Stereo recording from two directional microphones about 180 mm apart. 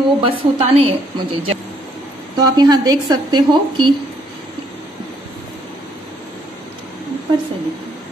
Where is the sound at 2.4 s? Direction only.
25° right (ahead or behind).